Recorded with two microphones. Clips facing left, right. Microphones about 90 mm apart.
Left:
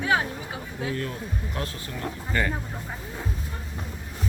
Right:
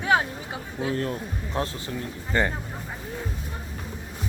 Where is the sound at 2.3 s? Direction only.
25° right (ahead or behind).